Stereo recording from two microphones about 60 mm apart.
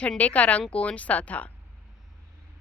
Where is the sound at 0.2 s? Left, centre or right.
Left.